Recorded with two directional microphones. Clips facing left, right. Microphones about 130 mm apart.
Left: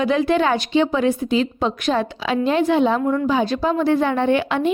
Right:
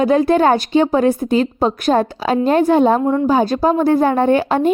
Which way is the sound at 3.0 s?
30° right (ahead or behind).